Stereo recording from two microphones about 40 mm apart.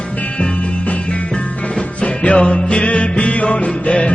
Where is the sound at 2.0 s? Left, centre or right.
Left.